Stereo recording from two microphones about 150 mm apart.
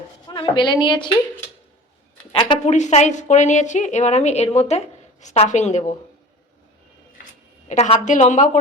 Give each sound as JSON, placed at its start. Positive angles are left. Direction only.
{"t": 0.3, "sound": "a woman's voice", "side_deg": 30}
{"t": 2.3, "sound": "a woman's voice", "side_deg": 30}
{"t": 2.6, "sound": "a woman's voice", "side_deg": 50}
{"t": 7.7, "sound": "a woman's voice", "side_deg": 50}